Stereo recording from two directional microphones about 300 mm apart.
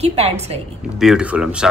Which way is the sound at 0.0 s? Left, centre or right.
Right.